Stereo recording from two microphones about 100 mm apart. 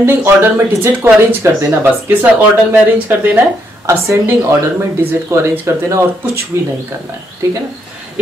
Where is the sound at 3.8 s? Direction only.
30° right (ahead or behind).